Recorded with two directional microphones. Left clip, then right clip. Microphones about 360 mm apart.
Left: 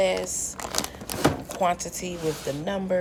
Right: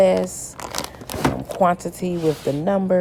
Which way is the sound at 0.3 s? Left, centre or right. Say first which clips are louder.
Left 2 dB; right.